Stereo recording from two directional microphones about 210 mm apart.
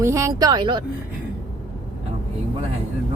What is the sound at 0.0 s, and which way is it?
Speech, 15° right (ahead or behind).